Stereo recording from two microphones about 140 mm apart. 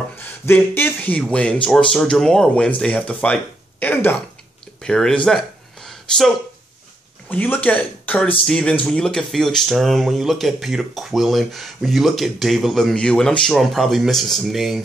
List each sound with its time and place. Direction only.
0.2 s speech: 15° left (ahead or behind)
4.8 s speech: 5° left (ahead or behind)
7.2 s speech: 15° left (ahead or behind)